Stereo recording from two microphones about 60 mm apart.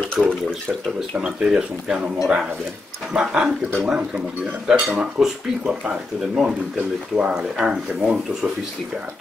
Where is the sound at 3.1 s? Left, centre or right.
Centre.